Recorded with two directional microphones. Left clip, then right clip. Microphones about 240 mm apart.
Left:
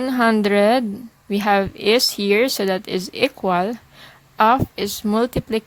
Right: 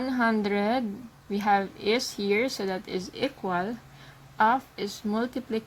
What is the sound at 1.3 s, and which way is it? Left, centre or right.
Speech, left.